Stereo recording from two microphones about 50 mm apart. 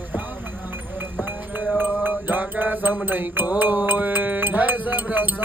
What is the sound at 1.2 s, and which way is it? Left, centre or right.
Music, right.